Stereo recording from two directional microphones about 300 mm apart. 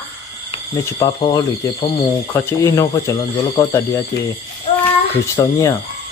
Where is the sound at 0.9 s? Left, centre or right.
Centre.